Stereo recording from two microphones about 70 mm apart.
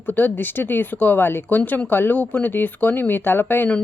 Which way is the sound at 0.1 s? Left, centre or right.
Left.